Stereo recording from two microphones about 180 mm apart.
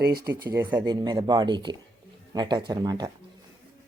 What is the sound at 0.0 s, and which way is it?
Speech, 60° right (ahead or behind).